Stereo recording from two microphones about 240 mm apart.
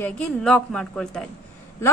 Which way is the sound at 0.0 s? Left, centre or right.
Centre.